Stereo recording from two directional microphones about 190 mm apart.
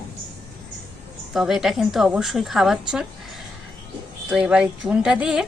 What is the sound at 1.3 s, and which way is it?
A woman's voice, centre (ahead or behind).